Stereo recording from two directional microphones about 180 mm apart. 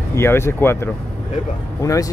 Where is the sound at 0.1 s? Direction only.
15° left (ahead or behind).